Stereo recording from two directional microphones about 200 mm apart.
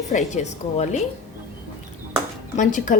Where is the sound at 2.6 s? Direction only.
40° left (ahead or behind).